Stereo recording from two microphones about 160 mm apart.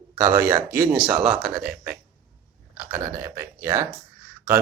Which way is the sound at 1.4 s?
70° right (ahead or behind).